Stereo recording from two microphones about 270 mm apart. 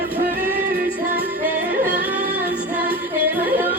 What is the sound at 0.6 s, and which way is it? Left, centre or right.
Music, right.